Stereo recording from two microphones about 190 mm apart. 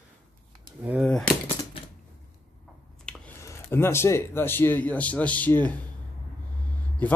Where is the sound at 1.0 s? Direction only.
5° left (ahead or behind).